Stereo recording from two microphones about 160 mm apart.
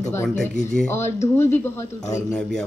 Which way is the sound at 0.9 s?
15° left (ahead or behind).